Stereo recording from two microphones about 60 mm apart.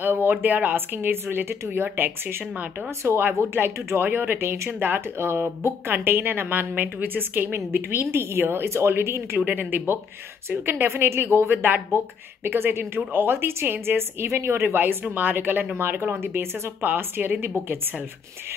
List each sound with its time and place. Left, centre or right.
0.0 s speech: right
9.5 s speech: right